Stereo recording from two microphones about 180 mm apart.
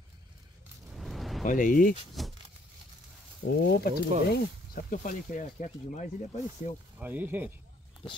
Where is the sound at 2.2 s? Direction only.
Centre (ahead or behind).